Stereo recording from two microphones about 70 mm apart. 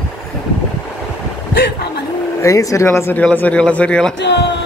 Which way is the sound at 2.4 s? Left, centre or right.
Left.